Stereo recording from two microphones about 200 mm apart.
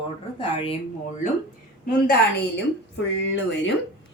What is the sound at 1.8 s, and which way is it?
Speech, 50° left (ahead or behind).